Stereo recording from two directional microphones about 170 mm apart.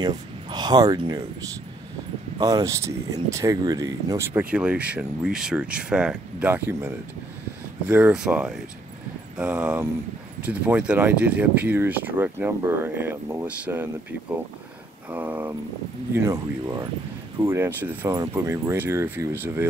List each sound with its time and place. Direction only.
0.0 s speech: 25° right (ahead or behind)
2.3 s speech: 20° right (ahead or behind)
7.9 s speech: 5° right (ahead or behind)
15.0 s speech: 10° right (ahead or behind)